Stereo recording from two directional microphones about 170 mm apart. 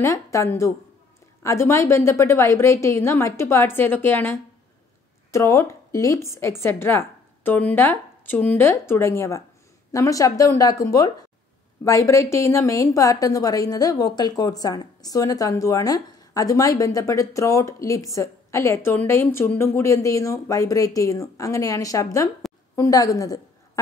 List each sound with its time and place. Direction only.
0.0 s a woman's voice: 15° left (ahead or behind)